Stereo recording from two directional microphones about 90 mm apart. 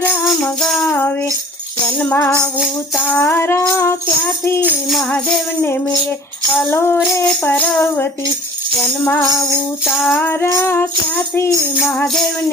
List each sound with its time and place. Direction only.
0.6 s music: 5° left (ahead or behind)
2.0 s music: 20° left (ahead or behind)
6.7 s music: 25° left (ahead or behind)
10.1 s music: 25° left (ahead or behind)